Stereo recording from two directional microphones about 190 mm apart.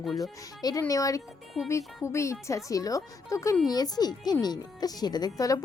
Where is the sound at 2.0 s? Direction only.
15° left (ahead or behind).